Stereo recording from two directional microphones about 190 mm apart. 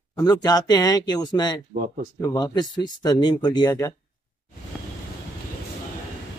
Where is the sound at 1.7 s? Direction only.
45° right (ahead or behind).